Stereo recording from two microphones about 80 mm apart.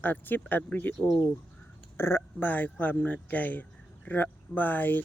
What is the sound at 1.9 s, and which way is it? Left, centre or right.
Speech, left.